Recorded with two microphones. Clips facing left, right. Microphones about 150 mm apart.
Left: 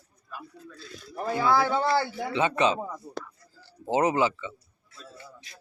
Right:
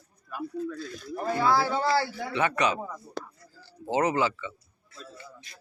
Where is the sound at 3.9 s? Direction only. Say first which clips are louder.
Left 2 dB; 20° left (ahead or behind).